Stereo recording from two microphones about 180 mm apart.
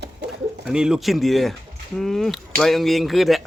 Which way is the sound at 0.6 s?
5° right (ahead or behind).